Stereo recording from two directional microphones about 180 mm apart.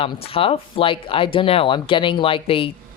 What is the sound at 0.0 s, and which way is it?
Speech, 30° left (ahead or behind).